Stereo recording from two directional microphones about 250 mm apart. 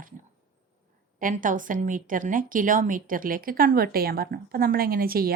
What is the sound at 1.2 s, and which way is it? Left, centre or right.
A woman's voice, right.